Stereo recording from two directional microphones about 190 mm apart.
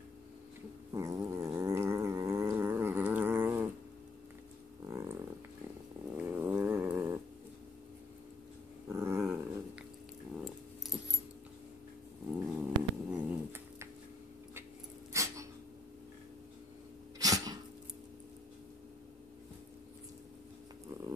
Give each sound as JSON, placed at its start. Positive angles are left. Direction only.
{"t": 0.9, "sound": "dog", "side_deg": -15}
{"t": 4.8, "sound": "a sound", "side_deg": -15}
{"t": 6.1, "sound": "dog", "side_deg": -10}
{"t": 8.8, "sound": "dog", "side_deg": -15}
{"t": 10.3, "sound": "keys jangling", "side_deg": 0}
{"t": 12.4, "sound": "cat", "side_deg": -10}
{"t": 15.1, "sound": "dog", "side_deg": -15}
{"t": 17.2, "sound": "sneeze", "side_deg": -20}